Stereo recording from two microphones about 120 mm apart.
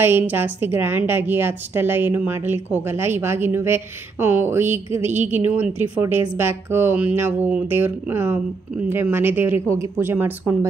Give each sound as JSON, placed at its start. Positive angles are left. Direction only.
{"t": 0.0, "sound": "a woman's voice", "side_deg": -15}